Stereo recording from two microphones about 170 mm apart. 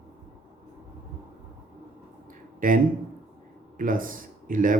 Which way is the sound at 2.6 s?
55° right (ahead or behind).